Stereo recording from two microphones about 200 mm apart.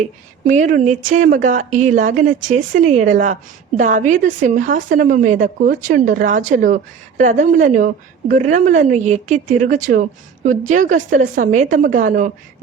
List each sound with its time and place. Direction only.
0.0 s a woman's voice: 40° right (ahead or behind)